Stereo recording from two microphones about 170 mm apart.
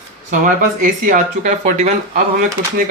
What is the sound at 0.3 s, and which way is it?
Speech, 50° right (ahead or behind).